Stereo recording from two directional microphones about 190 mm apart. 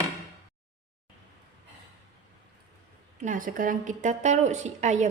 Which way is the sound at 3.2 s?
45° right (ahead or behind).